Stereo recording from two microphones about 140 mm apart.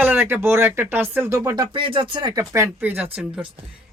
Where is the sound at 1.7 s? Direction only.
40° right (ahead or behind).